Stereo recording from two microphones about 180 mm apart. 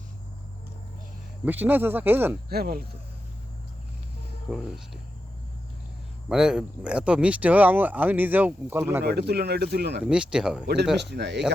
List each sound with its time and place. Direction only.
1.5 s speech: 10° right (ahead or behind)
2.5 s speech: 60° right (ahead or behind)
4.4 s speech: centre (ahead or behind)
6.2 s speech: 5° right (ahead or behind)
9.0 s speech: 65° right (ahead or behind)
10.0 s speech: 5° right (ahead or behind)
10.9 s speech: 70° right (ahead or behind)